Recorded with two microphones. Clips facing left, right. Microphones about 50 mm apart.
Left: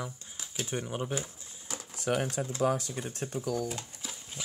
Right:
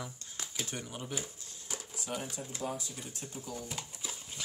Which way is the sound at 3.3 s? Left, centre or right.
Left.